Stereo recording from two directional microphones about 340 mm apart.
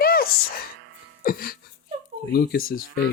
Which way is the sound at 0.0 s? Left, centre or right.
Left.